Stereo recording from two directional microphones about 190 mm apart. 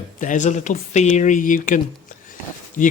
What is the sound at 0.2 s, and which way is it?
Speech, 40° left (ahead or behind).